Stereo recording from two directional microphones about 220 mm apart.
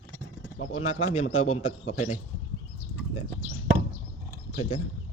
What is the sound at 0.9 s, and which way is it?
A man's voice, 70° left (ahead or behind).